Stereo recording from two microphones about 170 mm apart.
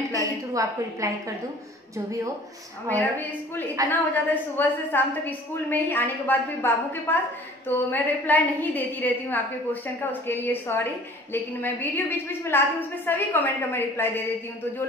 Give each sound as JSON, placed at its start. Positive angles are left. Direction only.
{"t": 0.1, "sound": "a woman's voice", "side_deg": -20}
{"t": 2.9, "sound": "a woman's voice", "side_deg": 10}